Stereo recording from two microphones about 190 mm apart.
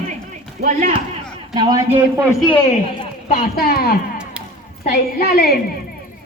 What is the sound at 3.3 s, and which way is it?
A woman's voice, 55° left (ahead or behind).